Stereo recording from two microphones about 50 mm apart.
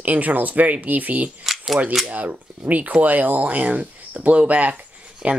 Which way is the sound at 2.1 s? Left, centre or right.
Right.